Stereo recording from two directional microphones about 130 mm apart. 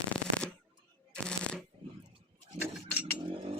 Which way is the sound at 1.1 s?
5° left (ahead or behind).